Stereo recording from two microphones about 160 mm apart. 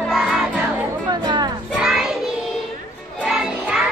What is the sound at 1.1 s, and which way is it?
Music, 25° right (ahead or behind).